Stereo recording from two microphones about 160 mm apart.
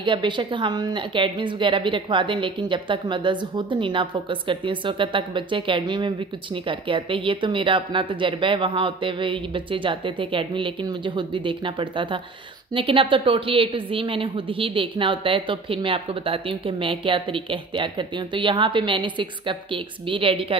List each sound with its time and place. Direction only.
0.0 s a woman's voice: 30° right (ahead or behind)